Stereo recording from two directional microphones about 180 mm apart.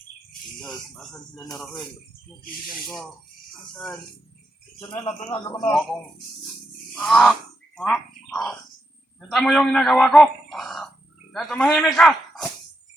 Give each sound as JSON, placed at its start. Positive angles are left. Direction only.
{"t": 0.6, "sound": "a man's voice", "side_deg": 0}
{"t": 4.8, "sound": "speech", "side_deg": 30}
{"t": 6.9, "sound": "a man's voice", "side_deg": 5}